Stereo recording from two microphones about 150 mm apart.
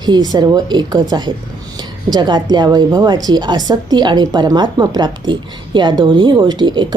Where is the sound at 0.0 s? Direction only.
25° right (ahead or behind).